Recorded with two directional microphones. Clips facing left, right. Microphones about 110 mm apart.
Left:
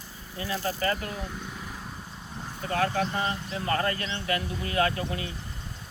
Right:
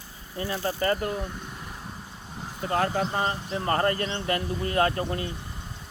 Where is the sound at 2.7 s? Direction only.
30° right (ahead or behind).